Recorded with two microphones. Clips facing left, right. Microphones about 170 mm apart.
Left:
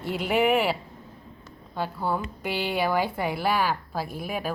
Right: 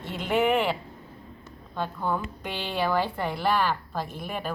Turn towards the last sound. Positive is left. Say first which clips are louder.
# left 2 dB
turn(degrees=10)  # may be behind; listen again after turning